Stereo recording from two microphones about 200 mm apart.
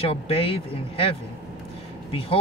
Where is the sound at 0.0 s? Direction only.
30° left (ahead or behind).